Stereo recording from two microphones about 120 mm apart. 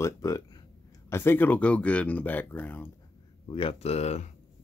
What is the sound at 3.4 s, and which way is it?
Speech, 50° left (ahead or behind).